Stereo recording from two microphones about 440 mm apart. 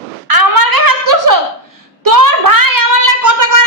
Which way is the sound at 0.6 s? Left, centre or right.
Right.